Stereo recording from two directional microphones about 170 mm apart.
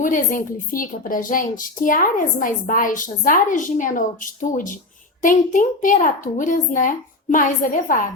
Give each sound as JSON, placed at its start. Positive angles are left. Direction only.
{"t": 0.0, "sound": "a woman's voice", "side_deg": 50}